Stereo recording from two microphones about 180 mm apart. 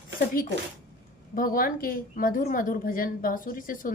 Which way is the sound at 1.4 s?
55° left (ahead or behind).